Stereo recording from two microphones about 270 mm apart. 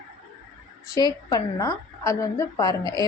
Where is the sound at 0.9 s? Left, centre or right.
Centre.